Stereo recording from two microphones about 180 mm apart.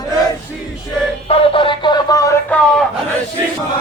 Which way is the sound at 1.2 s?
30° left (ahead or behind).